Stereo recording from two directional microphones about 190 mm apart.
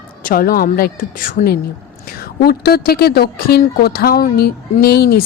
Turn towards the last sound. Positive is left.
turn(degrees=55)  # may be behind; listen again after turning